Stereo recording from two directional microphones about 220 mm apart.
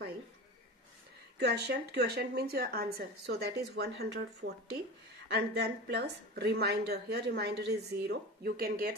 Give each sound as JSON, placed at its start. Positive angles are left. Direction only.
{"t": 1.4, "sound": "speech", "side_deg": -50}